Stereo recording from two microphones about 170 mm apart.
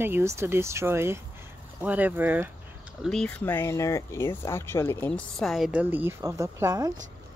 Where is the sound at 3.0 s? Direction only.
5° left (ahead or behind).